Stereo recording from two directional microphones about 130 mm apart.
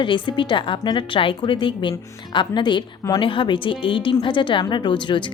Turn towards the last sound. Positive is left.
turn(degrees=40)  # may be behind; listen again after turning